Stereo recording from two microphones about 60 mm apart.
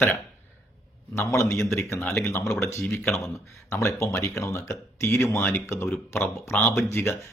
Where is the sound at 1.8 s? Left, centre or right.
Left.